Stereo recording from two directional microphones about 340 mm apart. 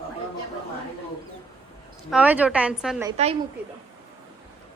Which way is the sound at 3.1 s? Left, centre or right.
Centre.